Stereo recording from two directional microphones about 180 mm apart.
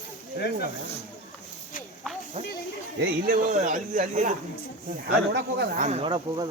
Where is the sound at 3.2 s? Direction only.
45° right (ahead or behind).